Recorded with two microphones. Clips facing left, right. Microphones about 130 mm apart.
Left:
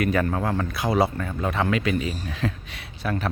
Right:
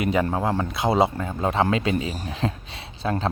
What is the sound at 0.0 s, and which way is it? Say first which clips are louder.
Speech: right 1 dB; 20° right (ahead or behind).